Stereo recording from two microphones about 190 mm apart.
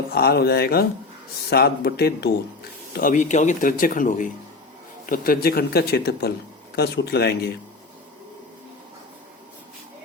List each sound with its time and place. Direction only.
0.1 s speech: 55° left (ahead or behind)
2.9 s speech: 45° left (ahead or behind)